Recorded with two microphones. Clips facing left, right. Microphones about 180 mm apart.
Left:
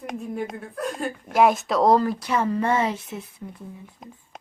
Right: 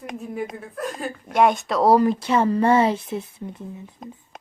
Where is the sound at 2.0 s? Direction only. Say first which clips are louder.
Right 4 dB; 25° right (ahead or behind).